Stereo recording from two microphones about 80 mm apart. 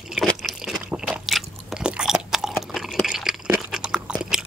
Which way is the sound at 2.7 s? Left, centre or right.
Centre.